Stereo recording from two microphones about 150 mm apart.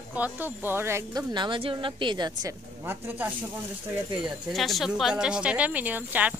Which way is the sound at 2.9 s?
15° right (ahead or behind).